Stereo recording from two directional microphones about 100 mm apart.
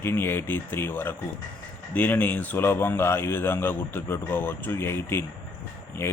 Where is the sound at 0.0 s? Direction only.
20° left (ahead or behind).